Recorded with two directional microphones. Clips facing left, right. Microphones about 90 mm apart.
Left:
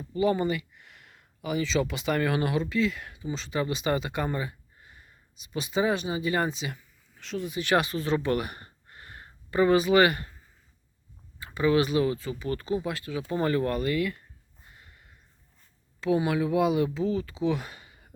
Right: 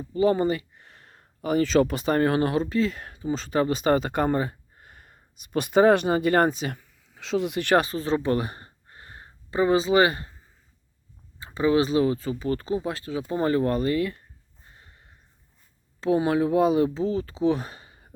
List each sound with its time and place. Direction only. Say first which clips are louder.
0.1 s speech: right 4 dB; 35° right (ahead or behind)
7.1 s speech: right 7 dB; 90° right
7.8 s speech: right 3 dB; 35° right (ahead or behind)
11.3 s speech: right 2 dB; 30° right (ahead or behind)
14.7 s a sound: right 1 dB; 30° right (ahead or behind)
16.0 s speech: right 3 dB; 35° right (ahead or behind)